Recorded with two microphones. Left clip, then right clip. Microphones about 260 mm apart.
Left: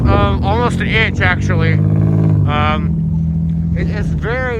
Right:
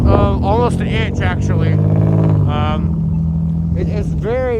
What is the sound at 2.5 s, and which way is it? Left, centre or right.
Speech, centre.